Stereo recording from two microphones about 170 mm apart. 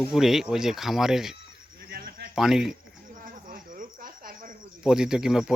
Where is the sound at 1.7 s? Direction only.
65° right (ahead or behind).